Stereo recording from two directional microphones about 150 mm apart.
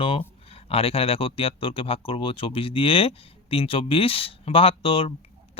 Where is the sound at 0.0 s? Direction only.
40° left (ahead or behind).